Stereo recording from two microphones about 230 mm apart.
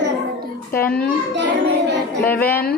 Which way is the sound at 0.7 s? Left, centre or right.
Centre.